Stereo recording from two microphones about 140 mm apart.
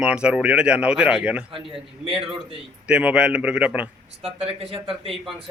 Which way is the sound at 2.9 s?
10° right (ahead or behind).